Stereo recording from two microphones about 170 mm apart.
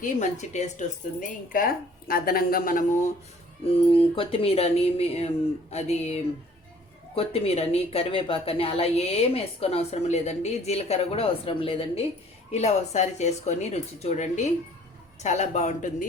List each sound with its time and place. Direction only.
0.0 s speech: 45° left (ahead or behind)
1.5 s speech: 60° left (ahead or behind)
3.7 s speech: 35° left (ahead or behind)